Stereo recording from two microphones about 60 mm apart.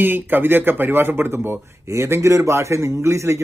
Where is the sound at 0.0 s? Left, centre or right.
Right.